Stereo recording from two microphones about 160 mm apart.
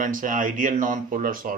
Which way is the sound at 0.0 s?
55° right (ahead or behind).